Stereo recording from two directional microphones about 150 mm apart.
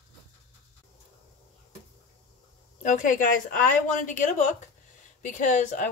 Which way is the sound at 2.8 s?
60° left (ahead or behind).